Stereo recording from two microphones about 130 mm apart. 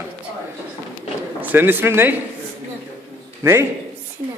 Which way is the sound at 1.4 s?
15° right (ahead or behind).